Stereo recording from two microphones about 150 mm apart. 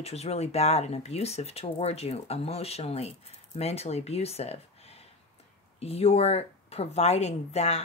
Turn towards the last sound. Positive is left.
turn(degrees=45)  # may be behind; listen again after turning